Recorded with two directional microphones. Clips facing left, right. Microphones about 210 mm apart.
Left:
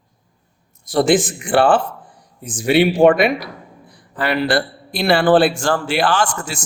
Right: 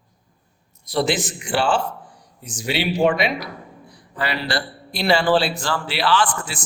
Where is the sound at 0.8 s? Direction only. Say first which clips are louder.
Left 7 dB; 50° left (ahead or behind).